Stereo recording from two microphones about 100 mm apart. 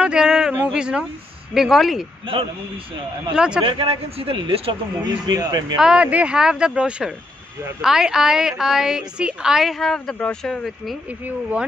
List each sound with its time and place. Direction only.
0.0 s a sound: 5° right (ahead or behind)
0.7 s a woman's voice: 10° right (ahead or behind)
3.3 s speech: 10° right (ahead or behind)
3.6 s speech: 60° right (ahead or behind)
5.0 s speech: 40° right (ahead or behind)
5.8 s a woman's voice: 10° right (ahead or behind)
11.1 s speech: 15° right (ahead or behind)